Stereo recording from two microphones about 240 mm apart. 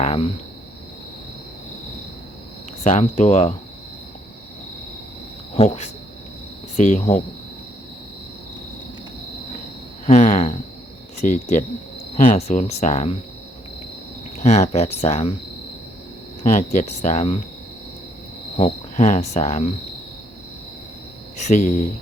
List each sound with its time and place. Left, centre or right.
0.0 s a sound: left
2.8 s speech: left
5.5 s speech: left
10.1 s speech: left
14.3 s speech: left
16.4 s speech: left
18.5 s speech: left
21.3 s speech: left